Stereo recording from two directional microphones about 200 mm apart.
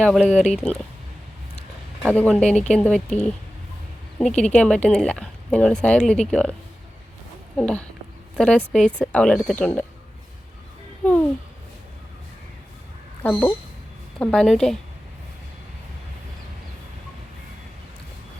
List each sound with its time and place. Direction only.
0.0 s a woman's voice: centre (ahead or behind)
2.0 s a woman's voice: 5° left (ahead or behind)
4.3 s speech: 35° left (ahead or behind)
4.5 s a woman's voice: 5° left (ahead or behind)
11.0 s a child's voice: 5° left (ahead or behind)
13.2 s a woman's voice: 5° left (ahead or behind)